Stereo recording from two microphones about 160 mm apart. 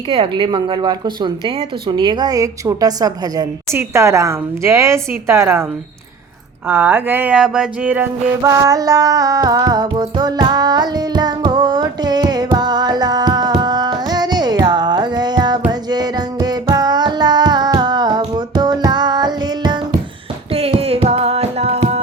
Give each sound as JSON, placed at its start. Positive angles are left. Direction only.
{"t": 0.1, "sound": "a woman's voice", "side_deg": -30}
{"t": 6.7, "sound": "speech", "side_deg": -10}
{"t": 8.4, "sound": "music", "side_deg": -20}
{"t": 20.5, "sound": "music", "side_deg": -40}